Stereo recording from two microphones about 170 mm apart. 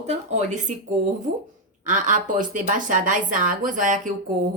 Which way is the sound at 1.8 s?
50° right (ahead or behind).